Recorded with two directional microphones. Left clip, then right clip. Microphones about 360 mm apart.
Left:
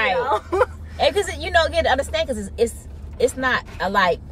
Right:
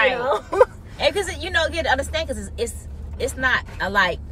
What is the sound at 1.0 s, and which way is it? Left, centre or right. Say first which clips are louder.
Speech: left 2 dB; centre.